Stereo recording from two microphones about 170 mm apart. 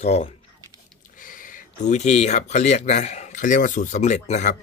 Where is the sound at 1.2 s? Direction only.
50° left (ahead or behind).